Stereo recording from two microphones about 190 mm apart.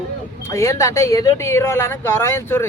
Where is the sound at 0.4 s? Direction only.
15° left (ahead or behind).